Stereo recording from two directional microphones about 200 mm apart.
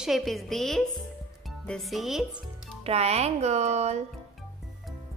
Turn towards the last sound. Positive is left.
turn(degrees=-35)  # may be behind; listen again after turning